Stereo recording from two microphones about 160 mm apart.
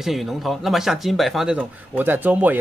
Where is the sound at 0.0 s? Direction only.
Centre (ahead or behind).